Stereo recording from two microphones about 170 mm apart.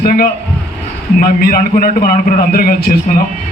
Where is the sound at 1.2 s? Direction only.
60° left (ahead or behind).